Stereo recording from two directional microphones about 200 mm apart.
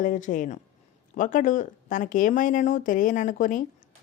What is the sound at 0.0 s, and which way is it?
Speech, 40° left (ahead or behind).